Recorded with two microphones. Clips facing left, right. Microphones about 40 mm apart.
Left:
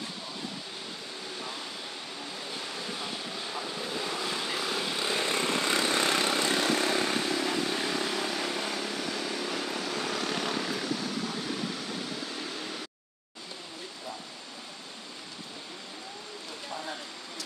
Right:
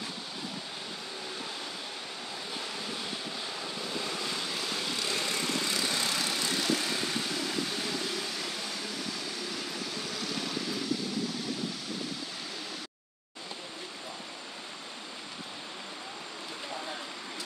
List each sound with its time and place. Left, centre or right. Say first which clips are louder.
2.5 s vehicle: even; centre; by 10.7 s left